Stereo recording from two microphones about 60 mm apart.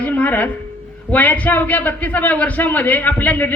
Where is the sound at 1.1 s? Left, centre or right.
Left.